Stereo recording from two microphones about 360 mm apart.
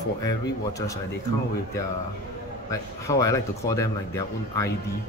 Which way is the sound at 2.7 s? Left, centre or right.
Centre.